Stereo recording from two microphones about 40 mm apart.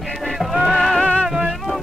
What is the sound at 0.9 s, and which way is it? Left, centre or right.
Music, left.